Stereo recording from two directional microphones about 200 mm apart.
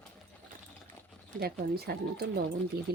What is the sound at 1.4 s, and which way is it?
Speech, 50° right (ahead or behind).